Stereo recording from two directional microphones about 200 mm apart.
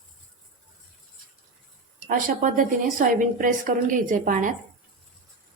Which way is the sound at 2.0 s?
40° right (ahead or behind).